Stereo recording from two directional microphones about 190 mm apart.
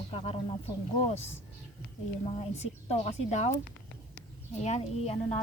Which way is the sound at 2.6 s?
35° left (ahead or behind).